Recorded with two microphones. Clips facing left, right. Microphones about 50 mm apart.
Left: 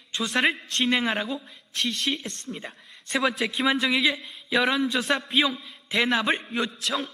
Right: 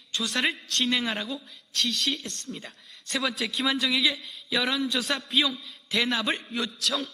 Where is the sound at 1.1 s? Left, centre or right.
Centre.